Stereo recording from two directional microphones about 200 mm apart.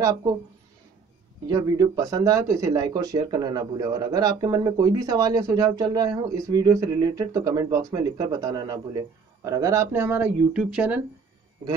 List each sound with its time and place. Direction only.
0.0 s speech: 15° right (ahead or behind)
1.5 s speech: 15° right (ahead or behind)